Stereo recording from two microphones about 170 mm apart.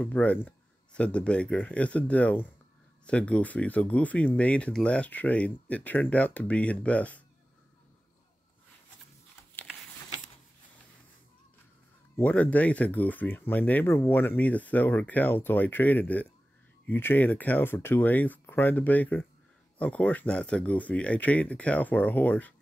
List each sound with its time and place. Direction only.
0.0 s speech: 10° left (ahead or behind)
12.2 s speech: 10° left (ahead or behind)